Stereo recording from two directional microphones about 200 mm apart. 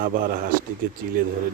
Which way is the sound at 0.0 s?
45° right (ahead or behind).